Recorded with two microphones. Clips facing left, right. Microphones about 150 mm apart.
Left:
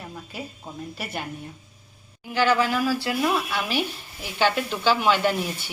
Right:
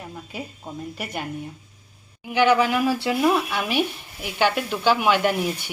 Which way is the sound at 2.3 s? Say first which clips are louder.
Right 3 dB; 15° right (ahead or behind).